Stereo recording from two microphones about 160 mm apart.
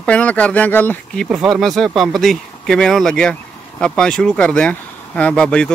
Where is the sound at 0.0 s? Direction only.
10° left (ahead or behind).